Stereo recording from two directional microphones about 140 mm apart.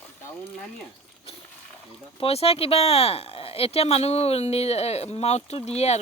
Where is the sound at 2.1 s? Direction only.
45° left (ahead or behind).